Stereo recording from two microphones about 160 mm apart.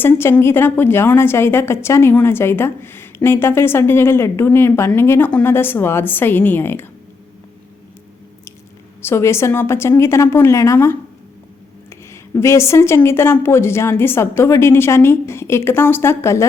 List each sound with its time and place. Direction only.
0.0 s a woman's voice: 15° left (ahead or behind)
9.0 s a woman's voice: 15° left (ahead or behind)
12.1 s a woman's voice: 20° left (ahead or behind)